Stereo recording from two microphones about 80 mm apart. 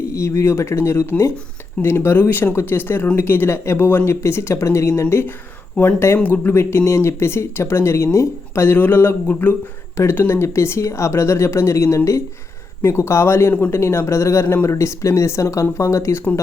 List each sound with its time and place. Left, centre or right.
0.2 s speech: left
5.7 s speech: centre
10.0 s speech: left